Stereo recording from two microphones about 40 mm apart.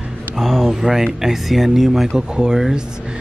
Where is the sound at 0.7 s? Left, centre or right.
Centre.